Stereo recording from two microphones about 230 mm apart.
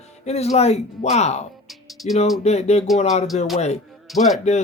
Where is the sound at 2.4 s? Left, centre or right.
Left.